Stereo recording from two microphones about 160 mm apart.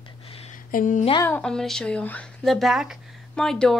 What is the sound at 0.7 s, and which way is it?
Speech, 55° left (ahead or behind).